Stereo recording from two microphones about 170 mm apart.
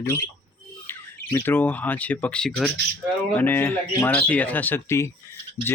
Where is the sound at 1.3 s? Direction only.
15° left (ahead or behind).